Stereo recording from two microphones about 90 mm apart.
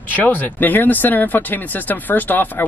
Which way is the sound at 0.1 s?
20° left (ahead or behind).